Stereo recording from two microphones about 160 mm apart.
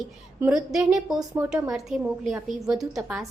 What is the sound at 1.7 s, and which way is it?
A woman's voice, centre (ahead or behind).